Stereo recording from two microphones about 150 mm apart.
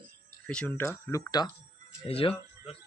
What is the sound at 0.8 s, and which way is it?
Speech, 20° left (ahead or behind).